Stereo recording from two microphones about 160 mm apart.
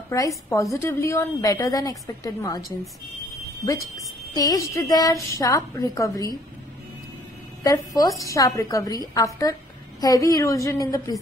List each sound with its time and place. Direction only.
0.1 s a woman's voice: 20° left (ahead or behind)
3.6 s a woman's voice: 20° left (ahead or behind)
7.6 s a woman's voice: 20° left (ahead or behind)